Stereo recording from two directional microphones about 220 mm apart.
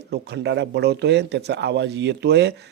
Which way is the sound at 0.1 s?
50° right (ahead or behind).